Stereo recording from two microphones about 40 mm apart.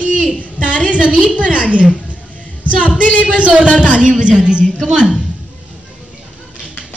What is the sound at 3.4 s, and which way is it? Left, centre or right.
A woman's voice, right.